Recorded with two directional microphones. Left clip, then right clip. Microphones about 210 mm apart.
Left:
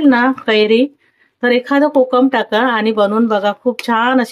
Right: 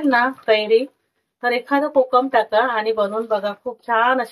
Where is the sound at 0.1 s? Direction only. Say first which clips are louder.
Left 3 dB; 40° left (ahead or behind).